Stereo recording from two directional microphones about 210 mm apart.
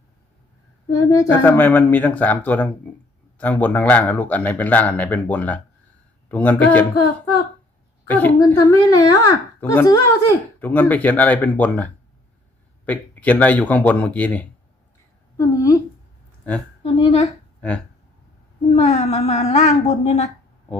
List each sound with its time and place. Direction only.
0.9 s speech: 15° left (ahead or behind)
8.0 s speech: 10° left (ahead or behind)
16.8 s a woman's voice: 25° left (ahead or behind)
18.8 s a woman's voice: 30° left (ahead or behind)